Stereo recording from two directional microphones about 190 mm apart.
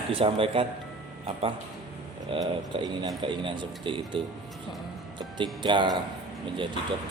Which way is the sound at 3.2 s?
25° right (ahead or behind).